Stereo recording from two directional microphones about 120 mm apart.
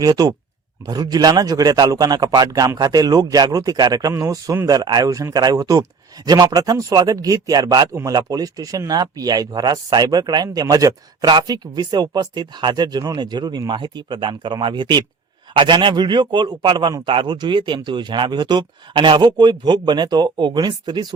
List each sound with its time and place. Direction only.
0.0 s speech: 35° right (ahead or behind)